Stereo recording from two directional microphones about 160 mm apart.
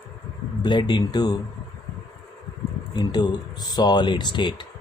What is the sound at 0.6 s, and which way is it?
Speech, 30° left (ahead or behind).